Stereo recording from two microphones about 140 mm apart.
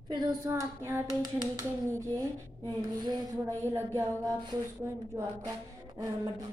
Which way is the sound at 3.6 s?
15° right (ahead or behind).